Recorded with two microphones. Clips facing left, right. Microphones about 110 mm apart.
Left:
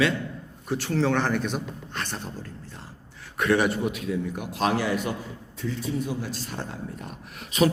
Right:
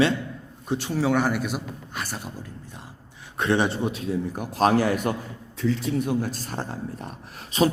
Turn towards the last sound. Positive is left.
turn(degrees=-35)  # may be behind; listen again after turning